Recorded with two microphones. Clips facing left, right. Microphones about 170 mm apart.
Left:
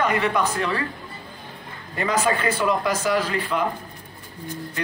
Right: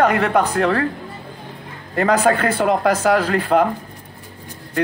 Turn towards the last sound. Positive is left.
turn(degrees=-55)  # may be behind; listen again after turning